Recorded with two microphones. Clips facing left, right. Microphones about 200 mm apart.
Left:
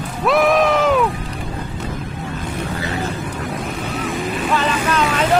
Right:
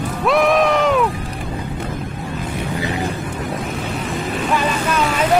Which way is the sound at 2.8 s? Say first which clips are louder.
Right 3 dB; 15° right (ahead or behind).